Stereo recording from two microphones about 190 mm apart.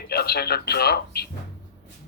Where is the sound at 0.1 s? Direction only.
55° left (ahead or behind).